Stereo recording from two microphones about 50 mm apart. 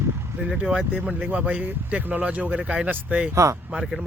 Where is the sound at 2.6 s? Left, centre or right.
Right.